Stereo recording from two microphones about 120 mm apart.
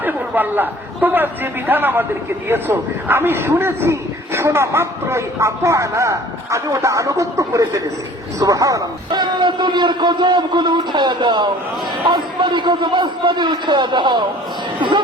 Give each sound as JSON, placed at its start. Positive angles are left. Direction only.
{"t": 0.0, "sound": "a man's voice", "side_deg": -15}